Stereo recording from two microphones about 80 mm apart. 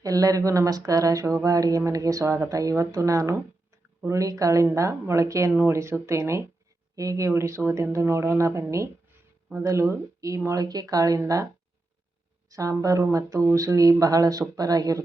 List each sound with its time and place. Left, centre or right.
0.0 s speech: right
12.5 s speech: right